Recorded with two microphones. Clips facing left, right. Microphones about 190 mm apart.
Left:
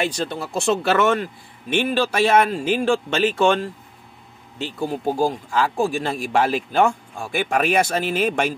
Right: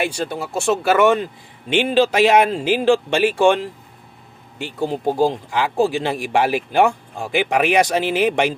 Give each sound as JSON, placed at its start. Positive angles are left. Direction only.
{"t": 0.0, "sound": "speech", "side_deg": -10}
{"t": 4.8, "sound": "speech", "side_deg": -20}